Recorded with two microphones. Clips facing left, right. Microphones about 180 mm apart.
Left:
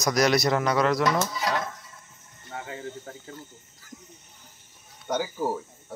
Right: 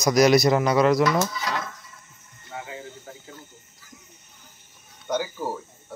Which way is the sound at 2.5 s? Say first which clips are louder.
Left 1 dB; 50° left (ahead or behind).